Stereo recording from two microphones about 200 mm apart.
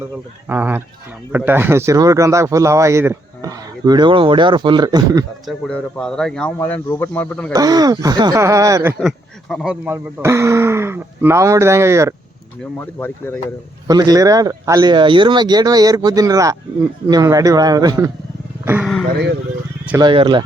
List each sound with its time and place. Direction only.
0.4 s speech: 10° right (ahead or behind)
5.5 s speech: 5° left (ahead or behind)
7.5 s speech: 20° right (ahead or behind)
9.0 s speech: centre (ahead or behind); by 12.1 s 15° right (ahead or behind)
12.8 s speech: 10° left (ahead or behind)
13.8 s speech: 20° right (ahead or behind)
20.0 s speech: 20° right (ahead or behind)